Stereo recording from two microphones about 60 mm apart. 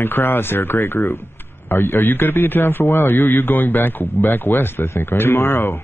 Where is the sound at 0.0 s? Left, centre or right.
Left.